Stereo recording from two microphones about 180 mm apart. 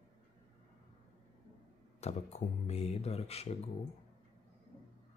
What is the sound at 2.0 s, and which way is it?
Speech, 35° left (ahead or behind).